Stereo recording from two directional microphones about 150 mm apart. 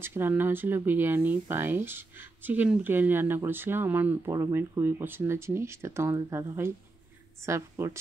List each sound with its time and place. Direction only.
0.0 s speech: 15° right (ahead or behind)